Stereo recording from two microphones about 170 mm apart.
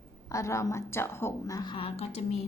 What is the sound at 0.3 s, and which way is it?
A woman's voice, 20° left (ahead or behind).